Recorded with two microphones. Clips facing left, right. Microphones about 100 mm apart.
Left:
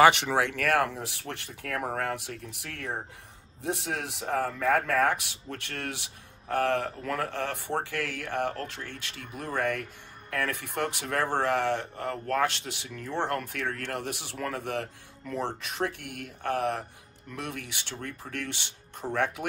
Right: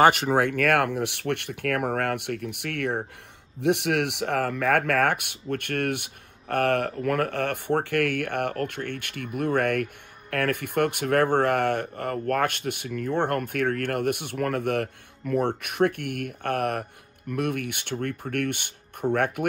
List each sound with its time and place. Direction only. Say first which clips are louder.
0.0 s speech: right 2 dB; 45° right (ahead or behind)